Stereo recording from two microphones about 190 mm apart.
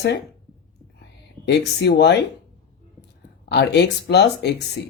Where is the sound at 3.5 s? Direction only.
60° left (ahead or behind).